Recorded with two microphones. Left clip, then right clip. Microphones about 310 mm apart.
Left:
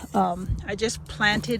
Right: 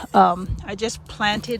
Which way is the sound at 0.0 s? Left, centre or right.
Right.